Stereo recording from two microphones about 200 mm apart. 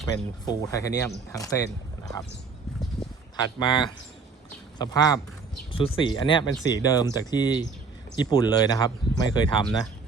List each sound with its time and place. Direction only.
0.1 s speech: 15° left (ahead or behind)
3.3 s speech: 20° left (ahead or behind)